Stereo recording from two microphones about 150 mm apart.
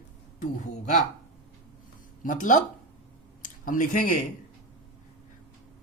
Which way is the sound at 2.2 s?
60° left (ahead or behind).